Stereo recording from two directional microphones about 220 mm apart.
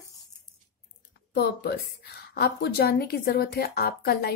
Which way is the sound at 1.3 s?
45° left (ahead or behind).